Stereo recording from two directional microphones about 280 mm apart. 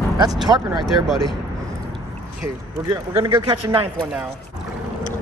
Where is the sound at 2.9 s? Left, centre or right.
Centre.